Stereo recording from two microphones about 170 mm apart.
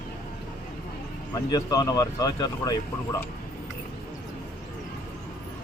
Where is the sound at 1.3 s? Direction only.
25° left (ahead or behind).